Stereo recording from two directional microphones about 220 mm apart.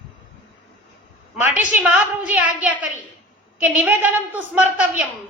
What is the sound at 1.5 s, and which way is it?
A woman's voice, 5° right (ahead or behind).